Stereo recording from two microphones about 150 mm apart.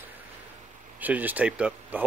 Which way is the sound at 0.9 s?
10° right (ahead or behind).